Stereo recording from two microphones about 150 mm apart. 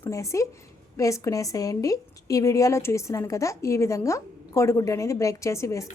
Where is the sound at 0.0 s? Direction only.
20° left (ahead or behind).